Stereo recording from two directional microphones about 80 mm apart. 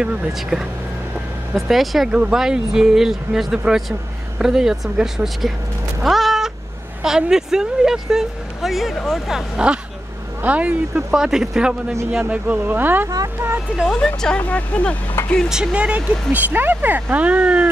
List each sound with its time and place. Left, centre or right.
0.3 s speech: centre
6.0 s cat: centre
7.0 s speech: centre
9.6 s speech: centre; by 13.5 s right
13.9 s speech: centre
15.2 s speech: left
15.5 s speech: centre